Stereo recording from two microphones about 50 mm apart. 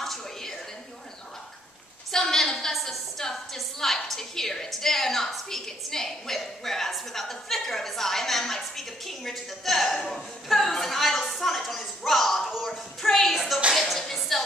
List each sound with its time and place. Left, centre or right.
0.0 s a sound: centre
2.1 s a woman's voice: centre
13.7 s music: centre